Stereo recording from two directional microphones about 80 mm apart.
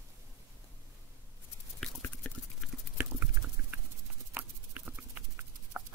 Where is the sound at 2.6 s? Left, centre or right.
Centre.